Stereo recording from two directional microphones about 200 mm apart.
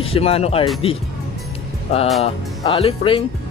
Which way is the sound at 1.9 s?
30° left (ahead or behind).